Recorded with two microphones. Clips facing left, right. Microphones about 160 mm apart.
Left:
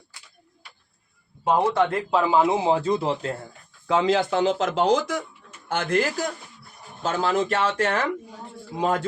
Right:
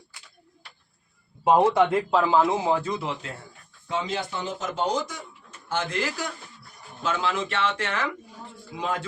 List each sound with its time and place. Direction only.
1.5 s speech: 10° right (ahead or behind)
2.3 s speech: 15° left (ahead or behind); by 3.3 s 40° left (ahead or behind)
3.8 s speech: 90° left; by 5.2 s 70° left (ahead or behind)
5.6 s a man's voice: 55° left (ahead or behind)